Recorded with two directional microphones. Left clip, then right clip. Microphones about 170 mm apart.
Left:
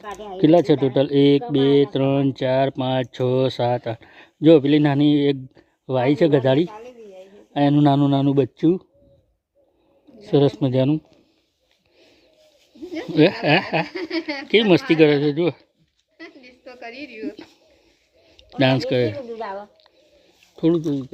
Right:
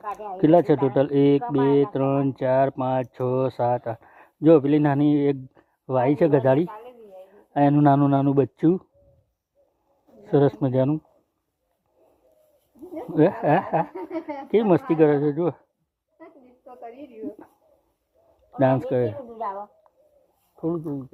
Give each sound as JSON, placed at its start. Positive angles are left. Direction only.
{"t": 0.0, "sound": "speech", "side_deg": 0}
{"t": 10.3, "sound": "speech", "side_deg": 0}
{"t": 13.1, "sound": "speech", "side_deg": 10}
{"t": 13.5, "sound": "speech", "side_deg": 30}
{"t": 13.9, "sound": "speech", "side_deg": 55}
{"t": 14.8, "sound": "speech", "side_deg": -30}
{"t": 15.0, "sound": "speech", "side_deg": 0}
{"t": 16.2, "sound": "a sound", "side_deg": 50}
{"t": 18.5, "sound": "speech", "side_deg": 20}
{"t": 19.3, "sound": "a sound", "side_deg": 45}
{"t": 20.6, "sound": "speech", "side_deg": 45}